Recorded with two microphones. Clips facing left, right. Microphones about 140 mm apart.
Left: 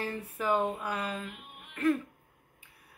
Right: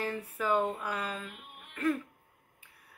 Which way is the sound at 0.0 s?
25° left (ahead or behind).